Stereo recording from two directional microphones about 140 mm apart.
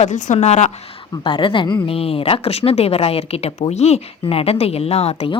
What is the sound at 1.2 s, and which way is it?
Speech, 35° left (ahead or behind).